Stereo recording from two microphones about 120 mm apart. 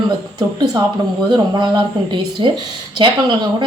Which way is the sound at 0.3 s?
30° right (ahead or behind).